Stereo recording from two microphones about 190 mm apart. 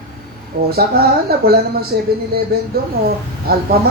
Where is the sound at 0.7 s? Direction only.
55° right (ahead or behind).